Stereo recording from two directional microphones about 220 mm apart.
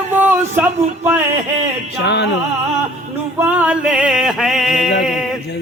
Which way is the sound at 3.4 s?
10° right (ahead or behind).